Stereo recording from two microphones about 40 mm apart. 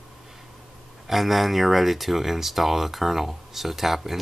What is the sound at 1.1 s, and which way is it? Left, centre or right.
Speech, centre.